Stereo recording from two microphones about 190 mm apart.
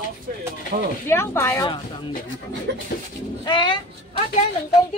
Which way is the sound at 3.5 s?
25° left (ahead or behind).